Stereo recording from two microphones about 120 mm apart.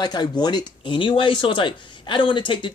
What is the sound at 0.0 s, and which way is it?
Speech, 35° left (ahead or behind).